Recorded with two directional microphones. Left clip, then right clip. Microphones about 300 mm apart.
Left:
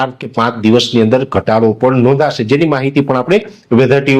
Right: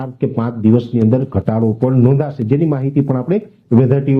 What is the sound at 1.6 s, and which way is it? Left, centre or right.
A man's voice, centre.